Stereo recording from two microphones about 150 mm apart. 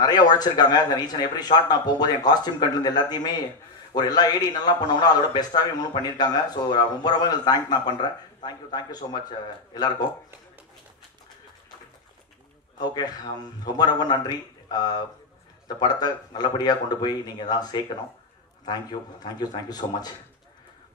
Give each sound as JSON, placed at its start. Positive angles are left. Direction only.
{"t": 0.0, "sound": "speech", "side_deg": 25}
{"t": 12.8, "sound": "speech", "side_deg": 25}